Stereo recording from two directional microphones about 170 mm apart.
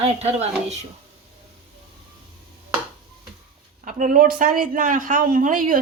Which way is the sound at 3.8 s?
55° right (ahead or behind).